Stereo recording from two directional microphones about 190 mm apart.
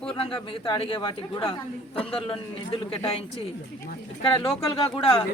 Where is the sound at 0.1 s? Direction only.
30° left (ahead or behind).